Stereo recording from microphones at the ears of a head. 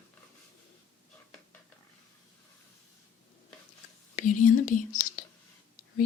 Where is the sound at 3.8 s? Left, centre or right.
Left.